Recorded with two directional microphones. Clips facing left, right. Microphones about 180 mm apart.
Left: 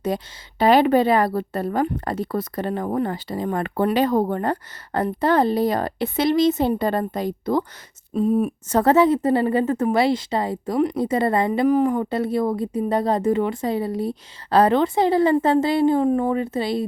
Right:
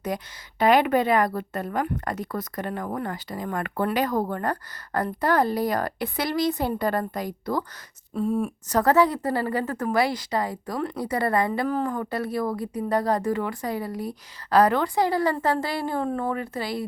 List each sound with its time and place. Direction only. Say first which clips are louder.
0.1 s a woman's voice: left 4 dB; 30° left (ahead or behind)